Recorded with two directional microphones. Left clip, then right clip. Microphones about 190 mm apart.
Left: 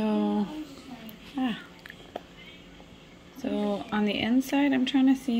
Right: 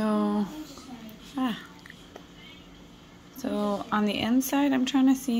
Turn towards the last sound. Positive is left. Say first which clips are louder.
# even
turn(degrees=0)  # may be behind; listen again after turning